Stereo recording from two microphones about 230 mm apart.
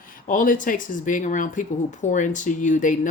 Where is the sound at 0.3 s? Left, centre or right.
Left.